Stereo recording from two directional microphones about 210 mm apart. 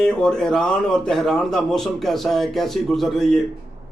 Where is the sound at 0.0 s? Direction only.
5° left (ahead or behind).